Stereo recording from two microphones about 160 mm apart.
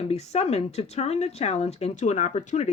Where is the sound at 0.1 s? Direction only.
40° left (ahead or behind).